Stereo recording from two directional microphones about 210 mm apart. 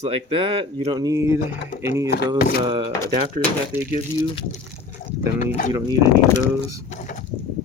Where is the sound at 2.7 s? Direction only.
25° right (ahead or behind).